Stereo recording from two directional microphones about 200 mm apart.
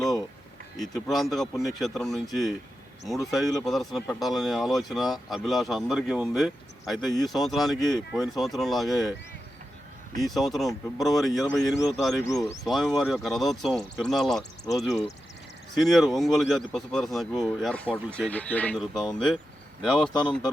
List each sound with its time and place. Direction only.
0.8 s speech: centre (ahead or behind)
10.2 s speech: centre (ahead or behind)
12.2 s speech: 15° left (ahead or behind)
12.6 s speech: centre (ahead or behind)